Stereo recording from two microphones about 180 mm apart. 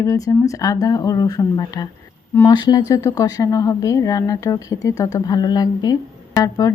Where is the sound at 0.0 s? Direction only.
20° left (ahead or behind).